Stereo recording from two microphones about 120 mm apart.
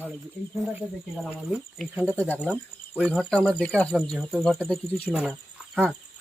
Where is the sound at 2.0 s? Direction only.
15° left (ahead or behind).